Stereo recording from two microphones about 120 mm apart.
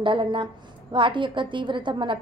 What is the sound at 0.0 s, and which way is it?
A woman's voice, 45° right (ahead or behind).